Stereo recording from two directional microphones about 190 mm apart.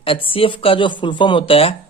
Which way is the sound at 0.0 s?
30° left (ahead or behind).